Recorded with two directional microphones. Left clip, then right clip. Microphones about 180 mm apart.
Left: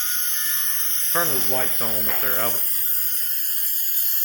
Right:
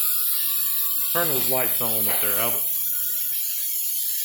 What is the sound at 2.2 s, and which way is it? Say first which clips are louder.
Speech: left 2 dB; 5° left (ahead or behind).